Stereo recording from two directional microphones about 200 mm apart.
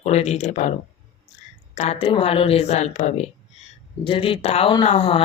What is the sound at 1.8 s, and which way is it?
A woman's voice, 30° left (ahead or behind).